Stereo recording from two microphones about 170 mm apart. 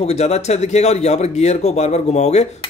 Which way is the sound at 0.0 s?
40° left (ahead or behind).